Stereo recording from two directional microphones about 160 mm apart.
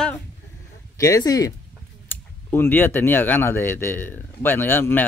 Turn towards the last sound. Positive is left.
turn(degrees=15)  # may be behind; listen again after turning